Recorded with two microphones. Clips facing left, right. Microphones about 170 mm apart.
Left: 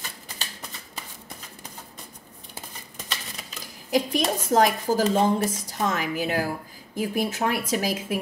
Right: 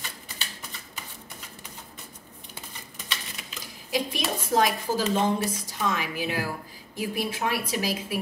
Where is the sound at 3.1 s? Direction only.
40° left (ahead or behind).